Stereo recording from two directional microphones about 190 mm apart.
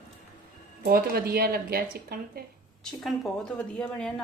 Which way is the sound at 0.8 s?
55° right (ahead or behind).